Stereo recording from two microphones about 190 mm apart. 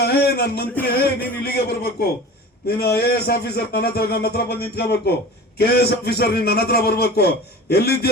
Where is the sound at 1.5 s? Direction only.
55° left (ahead or behind).